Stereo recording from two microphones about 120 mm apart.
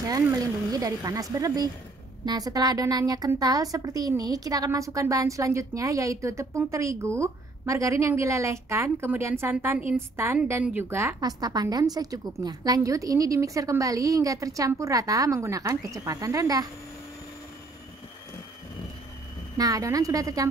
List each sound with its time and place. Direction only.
0.3 s a woman's voice: 30° right (ahead or behind)
11.1 s a woman's voice: 30° right (ahead or behind)
19.5 s a woman's voice: 30° right (ahead or behind)